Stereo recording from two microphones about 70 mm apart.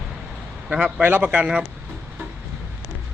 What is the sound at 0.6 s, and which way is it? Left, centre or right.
Speech, centre.